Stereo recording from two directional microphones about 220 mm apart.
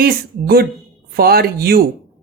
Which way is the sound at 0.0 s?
45° right (ahead or behind).